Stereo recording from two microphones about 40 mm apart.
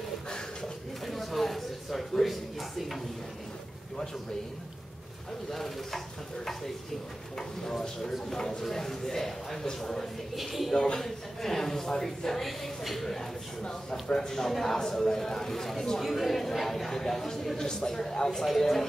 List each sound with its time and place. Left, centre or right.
1.0 s a sound: centre
5.5 s stir: centre
7.3 s speech: centre
10.3 s stir: centre
10.7 s speech: centre
13.6 s speech: centre
18.4 s stir: centre